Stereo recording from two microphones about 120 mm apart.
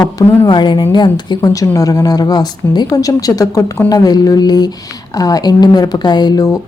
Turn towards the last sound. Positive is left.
turn(degrees=35)  # may be behind; listen again after turning